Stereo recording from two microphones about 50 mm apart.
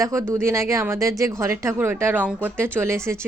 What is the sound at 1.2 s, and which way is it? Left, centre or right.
Speech, right.